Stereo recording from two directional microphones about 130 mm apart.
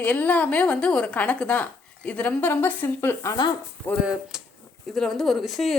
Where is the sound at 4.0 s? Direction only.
10° right (ahead or behind).